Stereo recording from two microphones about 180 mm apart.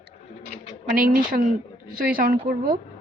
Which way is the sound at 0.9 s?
55° right (ahead or behind).